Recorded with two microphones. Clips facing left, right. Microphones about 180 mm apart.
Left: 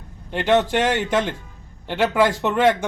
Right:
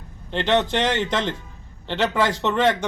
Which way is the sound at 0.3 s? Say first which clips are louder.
Left 2 dB; 10° left (ahead or behind).